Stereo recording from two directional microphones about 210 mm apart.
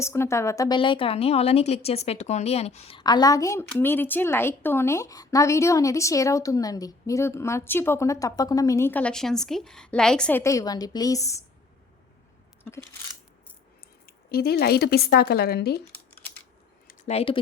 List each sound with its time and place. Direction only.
0.0 s a woman's voice: 15° left (ahead or behind)
14.3 s a woman's voice: 45° left (ahead or behind)
17.1 s a woman's voice: 25° left (ahead or behind)